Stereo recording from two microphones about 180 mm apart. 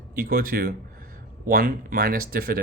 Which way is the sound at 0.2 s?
55° right (ahead or behind).